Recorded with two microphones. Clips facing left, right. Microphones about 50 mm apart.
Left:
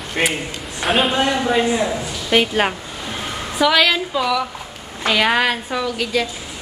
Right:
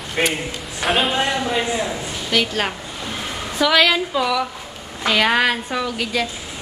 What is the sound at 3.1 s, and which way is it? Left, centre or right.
A woman's voice, centre.